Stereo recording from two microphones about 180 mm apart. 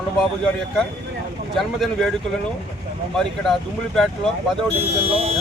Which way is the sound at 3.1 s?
Centre (ahead or behind).